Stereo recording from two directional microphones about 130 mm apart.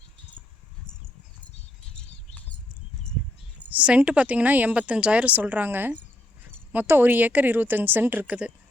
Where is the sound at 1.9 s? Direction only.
5° left (ahead or behind).